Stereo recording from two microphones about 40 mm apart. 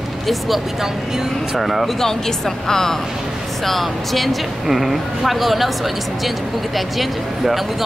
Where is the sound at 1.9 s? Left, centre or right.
Centre.